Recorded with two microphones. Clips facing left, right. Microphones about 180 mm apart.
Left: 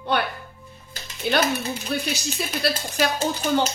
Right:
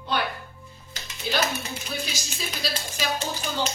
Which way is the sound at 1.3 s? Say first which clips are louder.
Left 5 dB; 65° left (ahead or behind).